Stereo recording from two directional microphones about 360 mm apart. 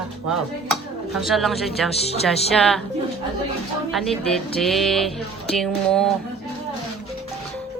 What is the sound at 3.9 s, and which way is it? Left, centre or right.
A woman's voice, centre.